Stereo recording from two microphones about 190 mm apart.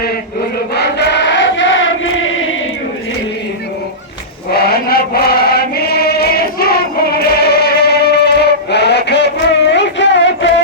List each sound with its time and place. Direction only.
0.7 s choir: 60° left (ahead or behind); by 2.6 s 90° left
4.5 s chant: 55° left (ahead or behind); by 10.5 s 70° left (ahead or behind)